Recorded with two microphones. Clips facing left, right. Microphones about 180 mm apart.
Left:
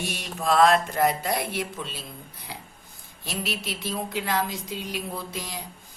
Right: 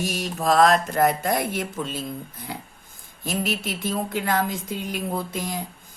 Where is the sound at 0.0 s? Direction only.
45° right (ahead or behind).